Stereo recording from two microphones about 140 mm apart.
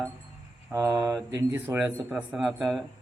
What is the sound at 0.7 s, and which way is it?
Speech, 20° right (ahead or behind).